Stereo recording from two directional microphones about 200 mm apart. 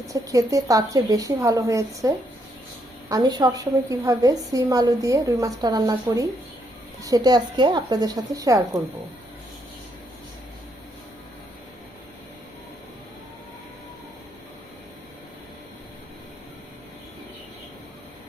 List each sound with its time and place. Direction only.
0.1 s a woman's voice: 15° right (ahead or behind)